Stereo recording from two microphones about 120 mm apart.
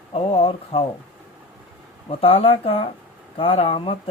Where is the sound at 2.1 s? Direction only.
50° left (ahead or behind).